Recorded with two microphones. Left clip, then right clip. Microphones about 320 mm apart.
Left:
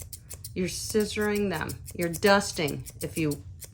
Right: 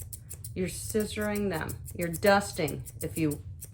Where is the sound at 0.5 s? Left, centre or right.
Left.